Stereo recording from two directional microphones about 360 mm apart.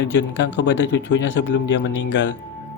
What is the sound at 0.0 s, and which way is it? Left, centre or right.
Speech, left.